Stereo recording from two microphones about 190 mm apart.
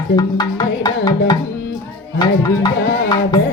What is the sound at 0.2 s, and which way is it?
Music, 20° left (ahead or behind).